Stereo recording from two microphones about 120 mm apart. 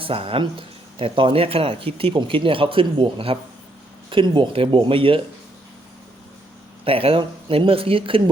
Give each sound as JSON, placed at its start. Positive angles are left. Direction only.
{"t": 0.0, "sound": "speech", "side_deg": -50}
{"t": 6.8, "sound": "speech", "side_deg": -50}